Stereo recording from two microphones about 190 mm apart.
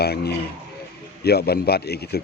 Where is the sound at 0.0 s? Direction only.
55° left (ahead or behind).